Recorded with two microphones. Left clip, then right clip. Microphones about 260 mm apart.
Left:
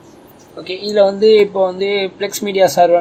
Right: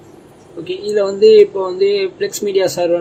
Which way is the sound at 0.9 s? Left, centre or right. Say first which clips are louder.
Even; centre.